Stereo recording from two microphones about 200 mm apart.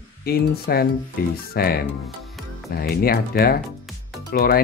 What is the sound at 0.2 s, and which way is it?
Speech, 50° left (ahead or behind).